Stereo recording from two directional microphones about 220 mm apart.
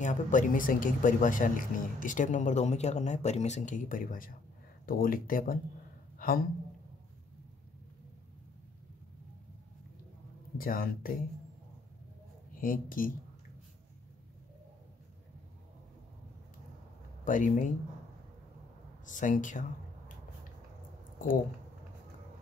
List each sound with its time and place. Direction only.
0.0 s speech: 35° left (ahead or behind)
6.1 s a sound: 40° left (ahead or behind)
10.6 s speech: 40° left (ahead or behind)
12.5 s speech: 40° left (ahead or behind)
17.2 s speech: 35° left (ahead or behind)
19.0 s speech: 35° left (ahead or behind)